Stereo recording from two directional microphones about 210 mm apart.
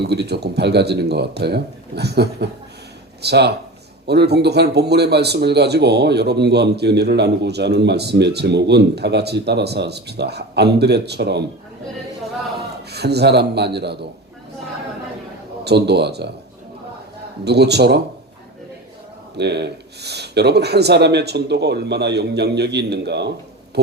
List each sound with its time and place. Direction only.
0.0 s speech: 50° right (ahead or behind)
12.5 s a man's voice: 50° right (ahead or behind)
15.6 s speech: 50° right (ahead or behind)
17.4 s speech: 50° right (ahead or behind)
19.4 s speech: 55° right (ahead or behind)
23.8 s a sound: 50° right (ahead or behind)